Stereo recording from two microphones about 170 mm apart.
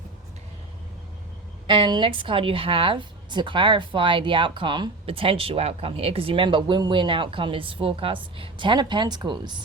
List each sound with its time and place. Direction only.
1.6 s speech: 30° right (ahead or behind)